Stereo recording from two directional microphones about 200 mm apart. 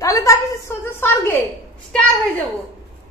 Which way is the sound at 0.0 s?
15° left (ahead or behind).